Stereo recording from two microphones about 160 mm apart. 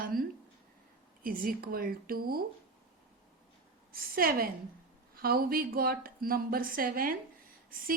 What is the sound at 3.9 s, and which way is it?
A woman's voice, 65° right (ahead or behind).